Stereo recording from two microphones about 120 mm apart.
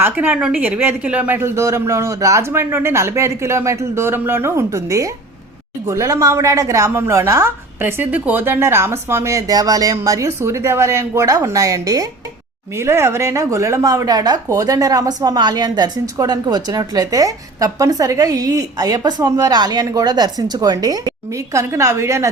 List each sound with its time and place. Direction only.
0.0 s a woman's voice: 15° right (ahead or behind)